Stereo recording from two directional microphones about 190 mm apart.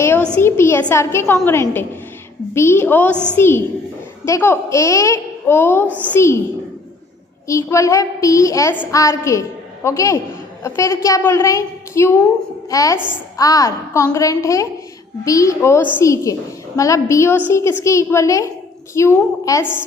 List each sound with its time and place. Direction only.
0.0 s a sound: 10° left (ahead or behind)
0.3 s a woman's voice: 15° left (ahead or behind)
7.4 s a woman's voice: 15° left (ahead or behind)